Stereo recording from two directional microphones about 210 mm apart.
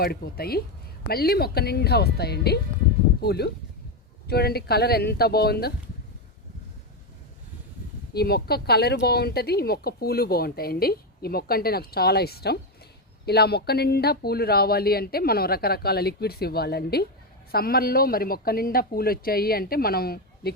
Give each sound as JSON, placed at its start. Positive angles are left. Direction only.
{"t": 0.0, "sound": "a woman's voice", "side_deg": 45}
{"t": 8.1, "sound": "a woman's voice", "side_deg": 50}